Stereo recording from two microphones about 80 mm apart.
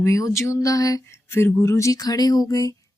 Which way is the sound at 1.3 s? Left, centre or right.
Left.